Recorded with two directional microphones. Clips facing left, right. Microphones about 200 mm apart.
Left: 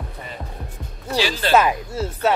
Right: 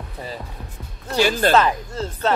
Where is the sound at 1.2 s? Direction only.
50° right (ahead or behind).